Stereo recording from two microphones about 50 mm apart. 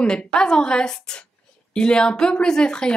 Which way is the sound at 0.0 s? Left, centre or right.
Centre.